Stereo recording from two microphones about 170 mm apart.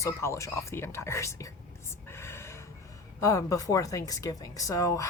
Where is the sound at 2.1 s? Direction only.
15° left (ahead or behind).